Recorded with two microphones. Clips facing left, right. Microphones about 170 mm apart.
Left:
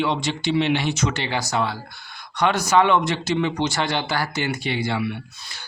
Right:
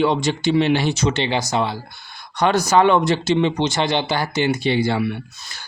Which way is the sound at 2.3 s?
35° right (ahead or behind).